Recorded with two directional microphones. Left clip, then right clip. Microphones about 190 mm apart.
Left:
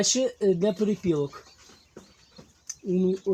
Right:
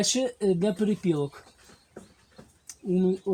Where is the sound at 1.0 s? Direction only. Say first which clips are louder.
Left 1 dB; 35° right (ahead or behind).